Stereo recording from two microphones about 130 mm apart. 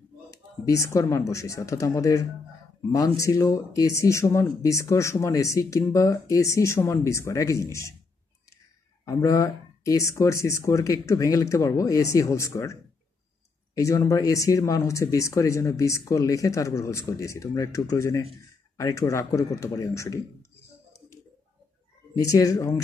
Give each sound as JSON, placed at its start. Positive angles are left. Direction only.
{"t": 0.3, "sound": "a sound", "side_deg": 25}
{"t": 1.1, "sound": "speech", "side_deg": 25}
{"t": 9.0, "sound": "speech", "side_deg": 25}
{"t": 13.7, "sound": "speech", "side_deg": 25}
{"t": 22.1, "sound": "speech", "side_deg": 25}